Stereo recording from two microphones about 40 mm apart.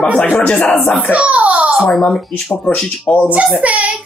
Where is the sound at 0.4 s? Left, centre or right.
Left.